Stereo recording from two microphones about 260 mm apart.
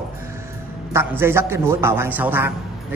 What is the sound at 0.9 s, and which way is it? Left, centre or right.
A man's voice, centre.